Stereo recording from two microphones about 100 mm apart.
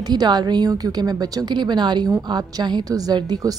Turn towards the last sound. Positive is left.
turn(degrees=-40)  # may be behind; listen again after turning